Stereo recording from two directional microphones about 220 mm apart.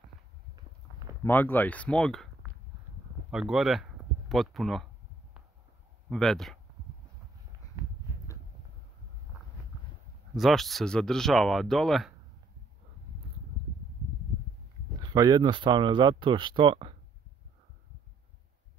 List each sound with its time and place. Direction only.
1.2 s speech: 10° left (ahead or behind)
3.3 s speech: 5° right (ahead or behind)
6.0 s speech: centre (ahead or behind)
10.3 s speech: centre (ahead or behind)
15.1 s speech: 15° right (ahead or behind)